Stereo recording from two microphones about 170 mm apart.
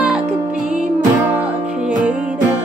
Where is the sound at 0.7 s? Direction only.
5° right (ahead or behind).